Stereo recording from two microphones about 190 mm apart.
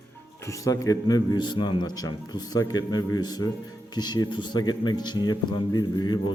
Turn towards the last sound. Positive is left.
turn(degrees=20)  # may be behind; listen again after turning